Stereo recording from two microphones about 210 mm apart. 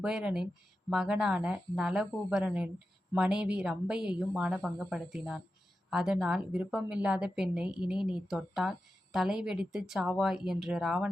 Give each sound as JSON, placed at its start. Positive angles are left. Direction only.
{"t": 0.0, "sound": "a woman's voice", "side_deg": -5}